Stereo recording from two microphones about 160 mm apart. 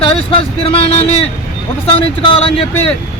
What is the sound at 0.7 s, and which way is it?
Speech, 40° left (ahead or behind).